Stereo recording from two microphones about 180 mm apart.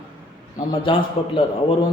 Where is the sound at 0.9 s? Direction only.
30° left (ahead or behind).